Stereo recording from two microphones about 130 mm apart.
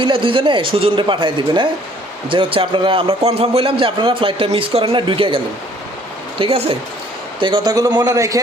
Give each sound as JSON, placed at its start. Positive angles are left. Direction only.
{"t": 0.0, "sound": "a man's voice", "side_deg": -40}
{"t": 6.4, "sound": "a man's voice", "side_deg": -45}